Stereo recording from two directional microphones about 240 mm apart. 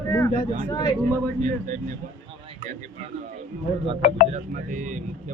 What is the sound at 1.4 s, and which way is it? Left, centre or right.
Speech, right.